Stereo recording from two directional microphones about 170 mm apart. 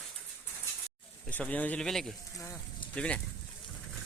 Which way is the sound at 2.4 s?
20° left (ahead or behind).